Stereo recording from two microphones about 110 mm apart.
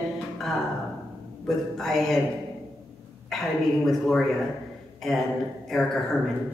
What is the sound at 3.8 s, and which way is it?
Speech, 5° left (ahead or behind).